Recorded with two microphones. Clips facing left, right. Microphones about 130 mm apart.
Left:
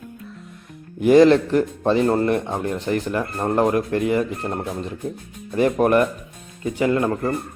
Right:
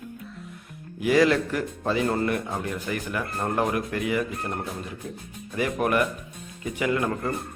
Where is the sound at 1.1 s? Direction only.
30° left (ahead or behind).